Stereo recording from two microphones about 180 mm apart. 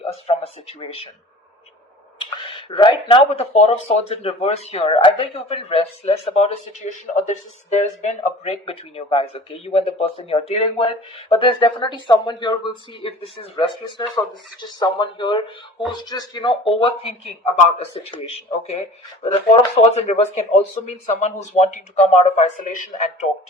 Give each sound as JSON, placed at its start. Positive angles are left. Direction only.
{"t": 0.3, "sound": "speech", "side_deg": 35}
{"t": 2.6, "sound": "speech", "side_deg": 25}